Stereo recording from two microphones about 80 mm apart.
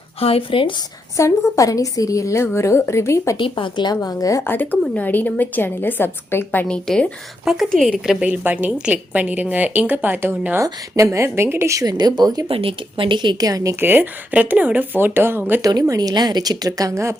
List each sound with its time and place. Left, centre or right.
0.5 s speech: left
1.1 s a woman's voice: left
3.3 s a woman's voice: left
4.4 s a woman's voice: left
6.7 s speech: centre
7.4 s a woman's voice: centre
7.7 s speech: centre
8.2 s a woman's voice: centre
10.6 s speech: right
11.7 s a woman's voice: right
13.0 s a woman's voice: right
13.4 s speech: right
13.7 s a woman's voice: right
15.6 s speech: right